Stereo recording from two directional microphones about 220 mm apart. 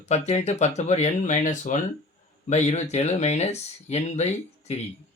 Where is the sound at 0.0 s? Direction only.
30° left (ahead or behind).